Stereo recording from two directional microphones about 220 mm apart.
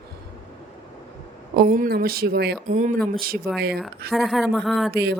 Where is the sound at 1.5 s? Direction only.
40° right (ahead or behind).